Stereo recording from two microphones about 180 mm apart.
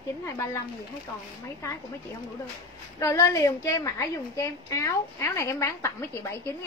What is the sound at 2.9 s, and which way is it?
A woman's voice, 15° left (ahead or behind).